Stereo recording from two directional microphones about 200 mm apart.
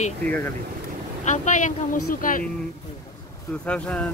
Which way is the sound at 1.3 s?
40° left (ahead or behind).